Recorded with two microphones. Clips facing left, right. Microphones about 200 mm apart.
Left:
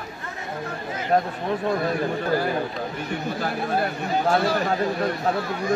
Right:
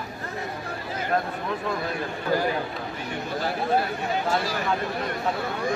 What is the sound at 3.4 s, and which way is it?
Speech, 55° left (ahead or behind).